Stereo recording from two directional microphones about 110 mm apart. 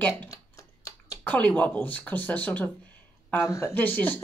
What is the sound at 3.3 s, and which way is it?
Speech, 25° left (ahead or behind).